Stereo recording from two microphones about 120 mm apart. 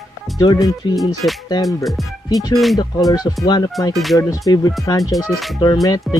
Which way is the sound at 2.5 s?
Centre (ahead or behind).